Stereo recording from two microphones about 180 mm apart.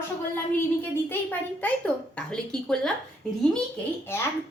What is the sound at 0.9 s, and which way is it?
A child's voice, 10° left (ahead or behind).